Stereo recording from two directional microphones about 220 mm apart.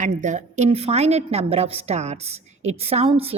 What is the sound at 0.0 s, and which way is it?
A woman's voice, 35° right (ahead or behind).